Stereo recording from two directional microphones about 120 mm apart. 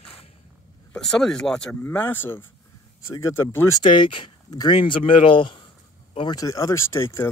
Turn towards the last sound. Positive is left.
turn(degrees=20)  # may be behind; listen again after turning